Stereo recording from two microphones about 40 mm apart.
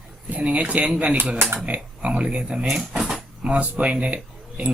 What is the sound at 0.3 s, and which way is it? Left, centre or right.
Speech, right.